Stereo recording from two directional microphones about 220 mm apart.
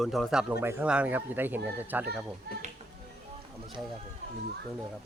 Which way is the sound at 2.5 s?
45° right (ahead or behind).